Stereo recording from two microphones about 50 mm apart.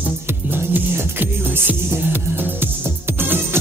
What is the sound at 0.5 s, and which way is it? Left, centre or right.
Music, right.